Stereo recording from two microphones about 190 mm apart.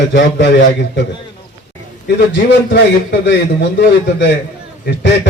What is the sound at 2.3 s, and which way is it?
A man's voice, 65° left (ahead or behind).